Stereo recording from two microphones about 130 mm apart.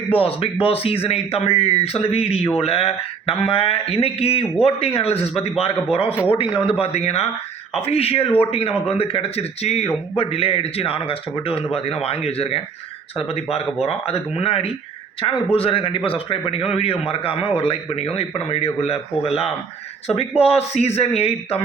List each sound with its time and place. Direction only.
0.1 s a man's voice: 45° left (ahead or behind)
15.2 s a man's voice: 35° left (ahead or behind)